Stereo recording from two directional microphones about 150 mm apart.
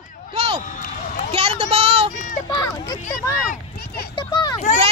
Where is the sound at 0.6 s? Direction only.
55° left (ahead or behind).